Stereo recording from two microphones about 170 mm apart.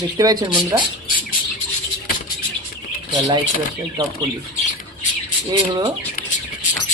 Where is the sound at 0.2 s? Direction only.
20° right (ahead or behind).